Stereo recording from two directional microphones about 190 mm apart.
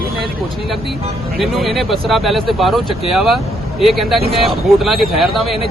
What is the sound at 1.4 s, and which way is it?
Speech, centre (ahead or behind).